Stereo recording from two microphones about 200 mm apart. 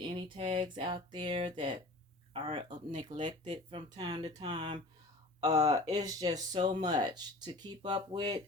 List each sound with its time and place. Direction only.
0.0 s speech: 25° right (ahead or behind)